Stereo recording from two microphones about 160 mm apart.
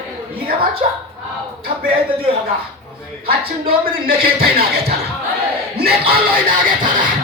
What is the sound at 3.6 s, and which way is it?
Speech, 65° right (ahead or behind).